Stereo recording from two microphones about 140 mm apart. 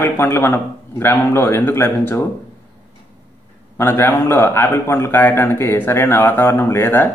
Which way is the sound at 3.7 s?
15° left (ahead or behind).